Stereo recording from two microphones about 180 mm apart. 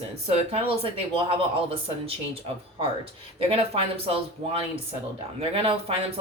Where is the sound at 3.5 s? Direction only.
35° right (ahead or behind).